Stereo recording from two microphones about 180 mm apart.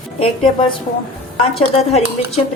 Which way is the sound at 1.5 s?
35° left (ahead or behind).